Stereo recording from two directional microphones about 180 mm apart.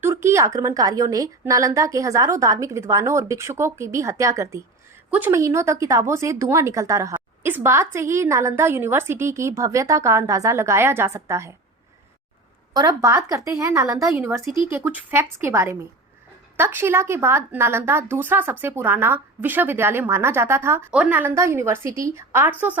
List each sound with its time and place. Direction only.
0.0 s a woman's voice: 15° right (ahead or behind)
12.7 s a woman's voice: 20° right (ahead or behind)